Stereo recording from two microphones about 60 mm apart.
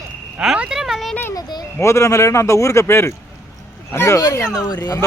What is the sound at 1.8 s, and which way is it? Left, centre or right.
A man's voice, left.